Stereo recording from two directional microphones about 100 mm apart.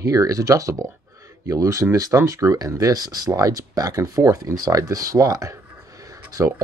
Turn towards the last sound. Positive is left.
turn(degrees=-35)  # may be behind; listen again after turning